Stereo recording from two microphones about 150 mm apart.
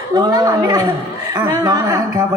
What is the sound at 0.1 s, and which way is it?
A man's voice, 25° right (ahead or behind).